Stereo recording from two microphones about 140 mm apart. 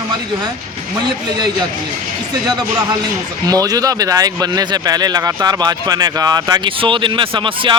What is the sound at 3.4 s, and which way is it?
Speech, 25° right (ahead or behind).